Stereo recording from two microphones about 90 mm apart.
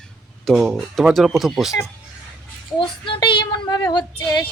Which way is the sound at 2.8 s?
65° left (ahead or behind).